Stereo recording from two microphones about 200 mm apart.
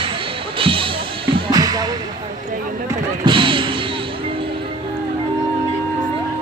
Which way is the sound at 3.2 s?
25° right (ahead or behind).